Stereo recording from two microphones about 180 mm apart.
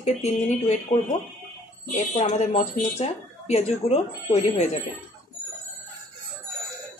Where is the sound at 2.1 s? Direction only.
40° left (ahead or behind).